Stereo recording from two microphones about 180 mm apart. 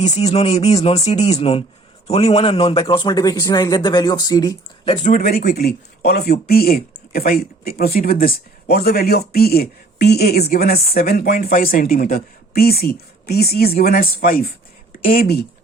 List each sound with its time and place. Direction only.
0.0 s speech: 35° left (ahead or behind); by 4.5 s 20° left (ahead or behind)
4.9 s speech: 40° left (ahead or behind)